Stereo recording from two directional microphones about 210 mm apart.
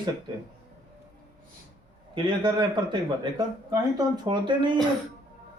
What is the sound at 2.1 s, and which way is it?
Speech, 20° right (ahead or behind).